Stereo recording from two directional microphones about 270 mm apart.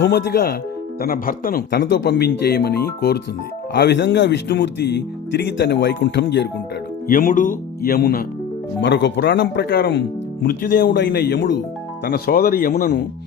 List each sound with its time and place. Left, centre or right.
0.0 s speech: left